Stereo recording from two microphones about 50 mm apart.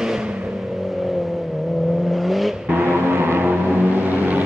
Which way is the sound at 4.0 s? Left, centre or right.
Right.